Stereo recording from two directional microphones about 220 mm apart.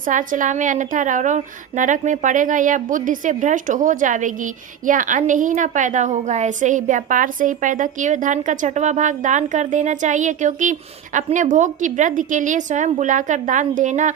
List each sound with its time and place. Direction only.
0.0 s a woman's voice: 35° right (ahead or behind)